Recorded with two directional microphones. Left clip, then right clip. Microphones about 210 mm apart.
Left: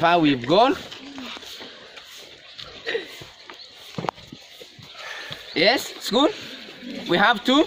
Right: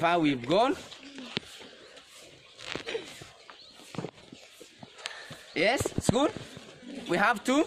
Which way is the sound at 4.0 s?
35° right (ahead or behind).